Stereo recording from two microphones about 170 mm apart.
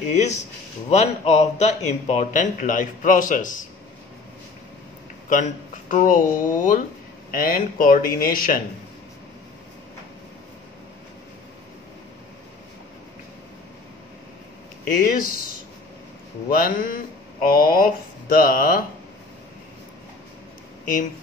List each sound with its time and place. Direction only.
0.1 s speech: 40° left (ahead or behind)
5.3 s speech: 50° left (ahead or behind)
15.0 s speech: 55° left (ahead or behind)
16.5 s speech: 55° left (ahead or behind)